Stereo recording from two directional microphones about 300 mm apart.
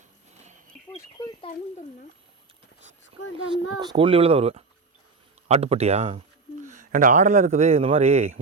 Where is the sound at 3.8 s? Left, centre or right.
Centre.